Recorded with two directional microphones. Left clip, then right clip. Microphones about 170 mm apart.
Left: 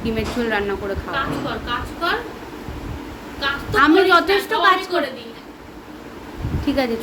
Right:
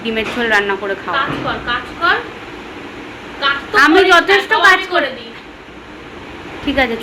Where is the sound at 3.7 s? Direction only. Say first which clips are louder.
Right 4 dB; 20° left (ahead or behind).